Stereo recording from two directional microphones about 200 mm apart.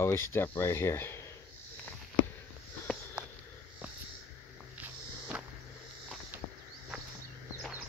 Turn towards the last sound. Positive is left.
turn(degrees=-10)  # may be behind; listen again after turning